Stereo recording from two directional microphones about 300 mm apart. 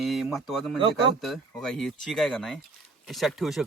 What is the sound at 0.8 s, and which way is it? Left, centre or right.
Speech, centre.